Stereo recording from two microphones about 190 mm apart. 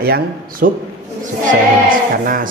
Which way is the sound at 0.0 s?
55° right (ahead or behind).